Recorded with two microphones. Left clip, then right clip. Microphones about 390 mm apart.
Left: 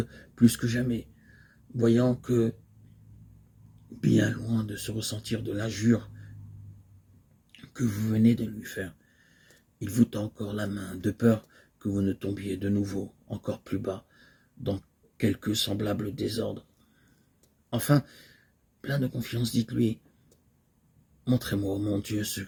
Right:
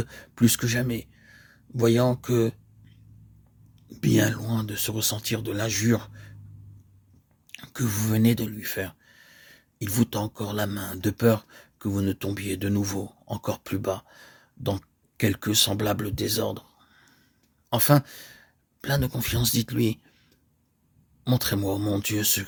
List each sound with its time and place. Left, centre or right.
0.0 s speech: right
4.0 s speech: right
7.9 s speech: right
16.1 s speech: right
16.4 s speech: right
17.7 s speech: right
21.2 s speech: right